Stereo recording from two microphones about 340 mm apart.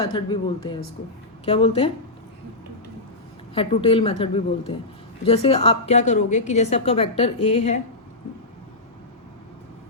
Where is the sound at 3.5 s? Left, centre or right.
Centre.